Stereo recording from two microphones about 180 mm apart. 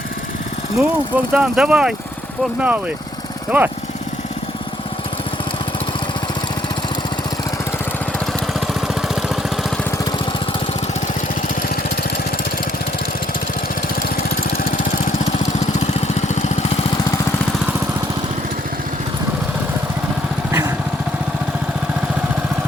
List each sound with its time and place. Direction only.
0.8 s speech: 5° right (ahead or behind)
8.6 s vehicle: centre (ahead or behind)
15.9 s lawn mower: 40° left (ahead or behind)
20.5 s lawn mower: 15° right (ahead or behind)